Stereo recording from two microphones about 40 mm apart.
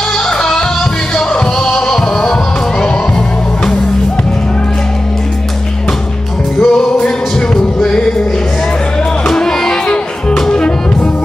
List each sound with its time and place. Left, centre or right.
0.4 s music: centre
6.6 s music: centre
9.3 s music: centre
10.5 s music: left